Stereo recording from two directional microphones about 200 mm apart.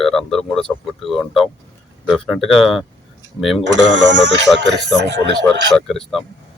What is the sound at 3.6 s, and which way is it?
Speech, 65° right (ahead or behind).